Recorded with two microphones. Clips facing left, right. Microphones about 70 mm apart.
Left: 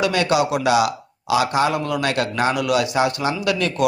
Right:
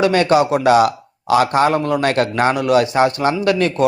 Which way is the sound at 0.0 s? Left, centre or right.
Right.